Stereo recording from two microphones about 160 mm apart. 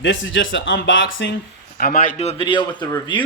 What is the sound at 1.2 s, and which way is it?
Speech, 90° left.